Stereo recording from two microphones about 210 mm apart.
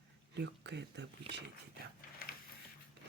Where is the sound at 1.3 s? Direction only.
30° right (ahead or behind).